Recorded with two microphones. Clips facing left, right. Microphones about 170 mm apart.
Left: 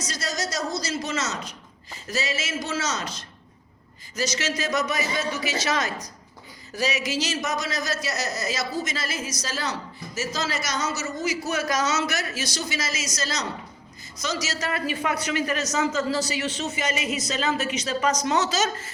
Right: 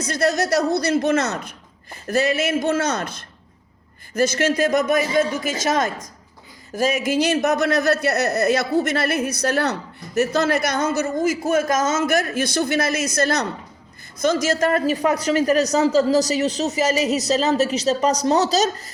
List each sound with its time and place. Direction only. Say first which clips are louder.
0.0 s a man's voice: right 10 dB; 60° right (ahead or behind); by 18.9 s 35° right (ahead or behind)